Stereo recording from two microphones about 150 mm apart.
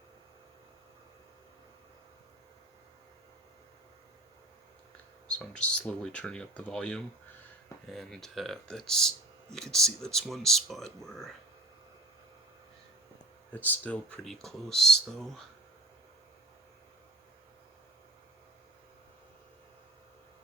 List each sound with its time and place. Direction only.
5.3 s speech: 5° left (ahead or behind)
13.5 s speech: 10° left (ahead or behind)